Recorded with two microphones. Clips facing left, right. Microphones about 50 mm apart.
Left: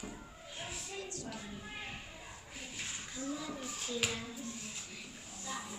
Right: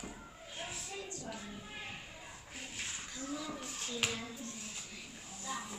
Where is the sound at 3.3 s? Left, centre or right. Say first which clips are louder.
Even; centre.